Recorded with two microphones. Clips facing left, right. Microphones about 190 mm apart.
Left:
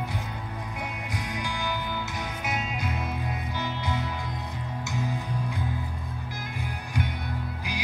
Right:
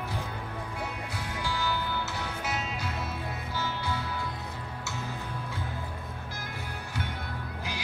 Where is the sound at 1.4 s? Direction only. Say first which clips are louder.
Right 3 dB; 15° left (ahead or behind).